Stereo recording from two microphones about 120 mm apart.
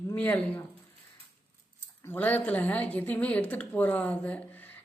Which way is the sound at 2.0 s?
15° left (ahead or behind).